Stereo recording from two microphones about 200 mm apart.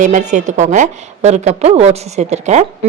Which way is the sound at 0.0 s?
35° right (ahead or behind).